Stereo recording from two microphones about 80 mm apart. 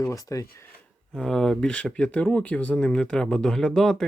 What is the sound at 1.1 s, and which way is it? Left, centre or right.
Speech, centre.